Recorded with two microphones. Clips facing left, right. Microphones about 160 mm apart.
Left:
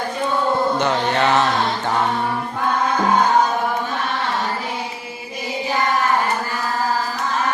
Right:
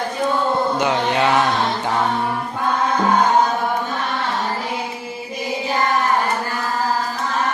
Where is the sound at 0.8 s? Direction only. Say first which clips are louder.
Even; 10° right (ahead or behind).